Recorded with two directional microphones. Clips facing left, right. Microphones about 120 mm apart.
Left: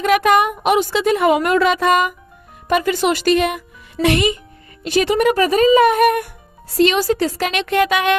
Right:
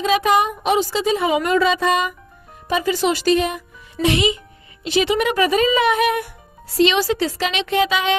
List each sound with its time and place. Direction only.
0.0 s speech: 60° left (ahead or behind)
4.0 s speech: 55° left (ahead or behind)